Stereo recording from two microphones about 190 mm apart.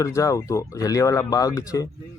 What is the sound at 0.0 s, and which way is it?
Speech, 15° left (ahead or behind).